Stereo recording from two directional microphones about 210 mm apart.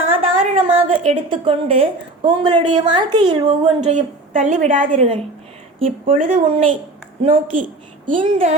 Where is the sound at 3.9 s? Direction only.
35° right (ahead or behind).